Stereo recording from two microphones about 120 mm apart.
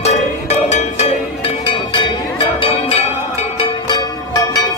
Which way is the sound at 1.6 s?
45° left (ahead or behind).